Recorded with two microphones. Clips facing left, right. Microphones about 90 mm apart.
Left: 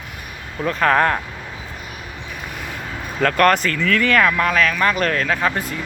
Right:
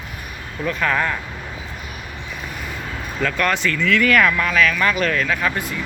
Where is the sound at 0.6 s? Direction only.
40° left (ahead or behind).